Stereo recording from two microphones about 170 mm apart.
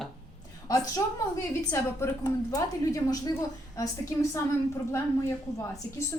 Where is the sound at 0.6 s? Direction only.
20° left (ahead or behind).